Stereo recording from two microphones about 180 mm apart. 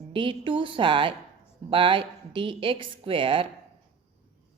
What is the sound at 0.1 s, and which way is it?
Speech, 30° right (ahead or behind).